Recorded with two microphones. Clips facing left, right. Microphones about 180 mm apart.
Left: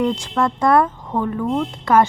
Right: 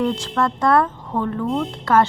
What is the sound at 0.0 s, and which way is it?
Speech, 10° left (ahead or behind).